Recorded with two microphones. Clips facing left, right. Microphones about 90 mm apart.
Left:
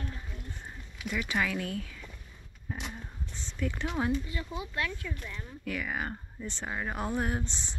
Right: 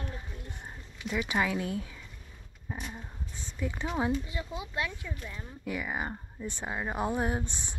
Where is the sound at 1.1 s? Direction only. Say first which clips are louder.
Right 2 dB; 25° right (ahead or behind).